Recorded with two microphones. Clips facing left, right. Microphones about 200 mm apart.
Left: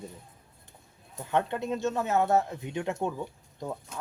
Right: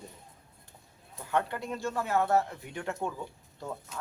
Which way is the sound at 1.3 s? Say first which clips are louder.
Left 3 dB; 20° left (ahead or behind).